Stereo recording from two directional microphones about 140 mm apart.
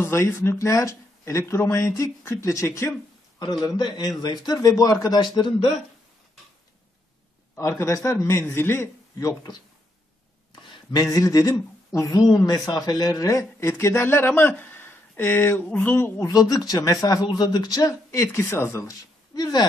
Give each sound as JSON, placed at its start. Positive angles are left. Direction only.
{"t": 0.0, "sound": "a man's voice", "side_deg": 15}
{"t": 7.5, "sound": "speech", "side_deg": 20}